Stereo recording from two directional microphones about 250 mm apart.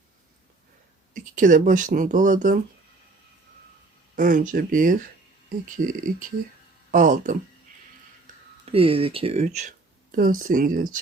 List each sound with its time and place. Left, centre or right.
1.1 s speech: right
4.1 s speech: right
8.6 s speech: right